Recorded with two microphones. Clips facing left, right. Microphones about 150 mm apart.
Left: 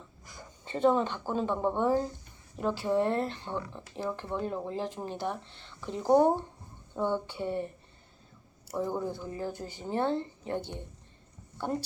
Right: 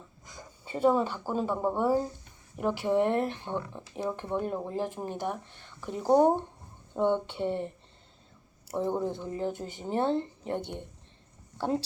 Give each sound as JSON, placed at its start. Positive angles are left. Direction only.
{"t": 0.6, "sound": "speech", "side_deg": -10}
{"t": 6.9, "sound": "speech", "side_deg": -25}
{"t": 8.7, "sound": "speech", "side_deg": -20}